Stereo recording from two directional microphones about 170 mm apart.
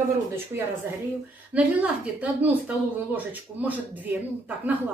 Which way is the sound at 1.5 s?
10° right (ahead or behind).